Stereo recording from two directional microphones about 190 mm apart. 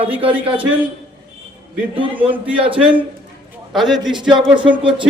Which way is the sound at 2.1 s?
10° right (ahead or behind).